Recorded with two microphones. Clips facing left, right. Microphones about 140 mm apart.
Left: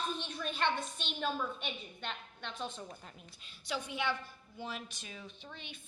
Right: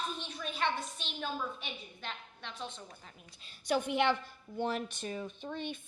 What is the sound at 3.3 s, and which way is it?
A woman's voice, 35° right (ahead or behind).